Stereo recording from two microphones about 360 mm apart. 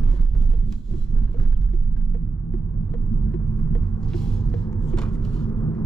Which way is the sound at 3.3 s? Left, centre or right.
Centre.